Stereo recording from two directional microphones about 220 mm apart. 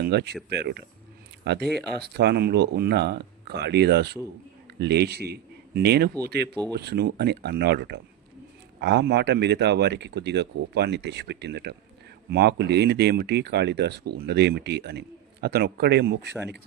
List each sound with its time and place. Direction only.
0.0 s a man's voice: 50° right (ahead or behind)